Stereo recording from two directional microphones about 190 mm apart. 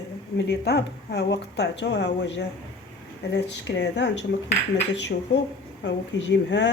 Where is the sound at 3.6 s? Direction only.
65° left (ahead or behind).